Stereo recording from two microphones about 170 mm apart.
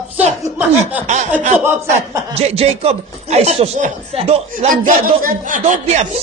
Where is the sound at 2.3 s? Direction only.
35° right (ahead or behind).